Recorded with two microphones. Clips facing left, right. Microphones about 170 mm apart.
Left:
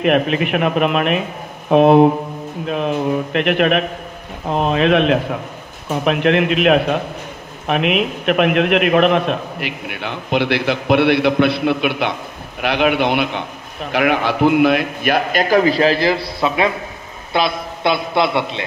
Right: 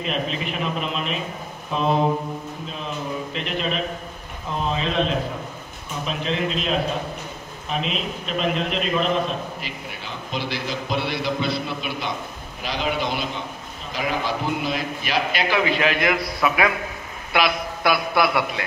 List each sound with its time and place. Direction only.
0.0 s a man's voice: 65° left (ahead or behind); by 18.6 s 25° left (ahead or behind)